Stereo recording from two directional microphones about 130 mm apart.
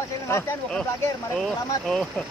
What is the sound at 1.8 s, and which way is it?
Speech, 5° left (ahead or behind).